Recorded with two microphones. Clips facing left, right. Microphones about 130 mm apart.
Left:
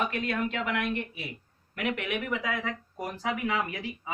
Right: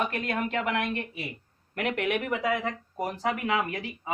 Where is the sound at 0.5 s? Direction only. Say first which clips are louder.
Right 2 dB; 55° right (ahead or behind).